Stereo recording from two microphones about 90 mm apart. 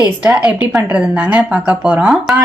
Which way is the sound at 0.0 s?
10° right (ahead or behind).